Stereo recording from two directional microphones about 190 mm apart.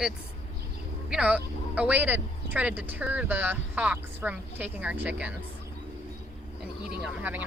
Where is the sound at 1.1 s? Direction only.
5° right (ahead or behind).